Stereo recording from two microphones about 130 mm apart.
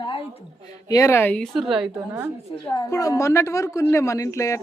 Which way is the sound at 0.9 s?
20° left (ahead or behind).